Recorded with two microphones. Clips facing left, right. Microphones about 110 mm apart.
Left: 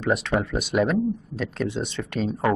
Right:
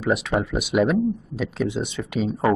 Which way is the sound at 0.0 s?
5° right (ahead or behind).